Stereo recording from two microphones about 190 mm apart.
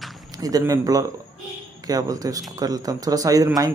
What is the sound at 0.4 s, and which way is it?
A man's voice, 20° right (ahead or behind).